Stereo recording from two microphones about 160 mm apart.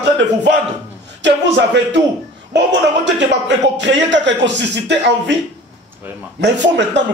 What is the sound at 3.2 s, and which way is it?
A man's voice, 90° right.